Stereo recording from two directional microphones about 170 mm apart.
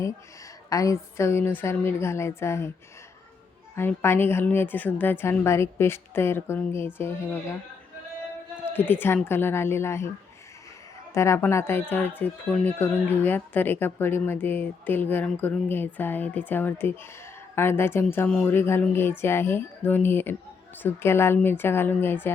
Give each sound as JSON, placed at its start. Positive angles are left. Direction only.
{"t": 0.7, "sound": "speech", "side_deg": 20}
{"t": 3.8, "sound": "speech", "side_deg": 15}
{"t": 8.7, "sound": "speech", "side_deg": 10}
{"t": 11.1, "sound": "speech", "side_deg": 15}